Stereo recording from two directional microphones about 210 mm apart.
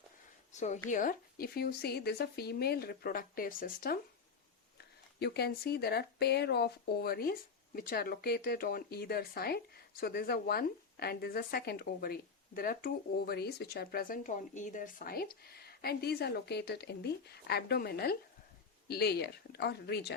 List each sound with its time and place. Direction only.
0.5 s a woman's voice: 35° left (ahead or behind)
5.2 s speech: 50° left (ahead or behind)